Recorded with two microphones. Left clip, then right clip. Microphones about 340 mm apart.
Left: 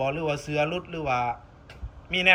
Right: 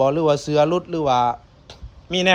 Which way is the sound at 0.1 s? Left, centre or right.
Right.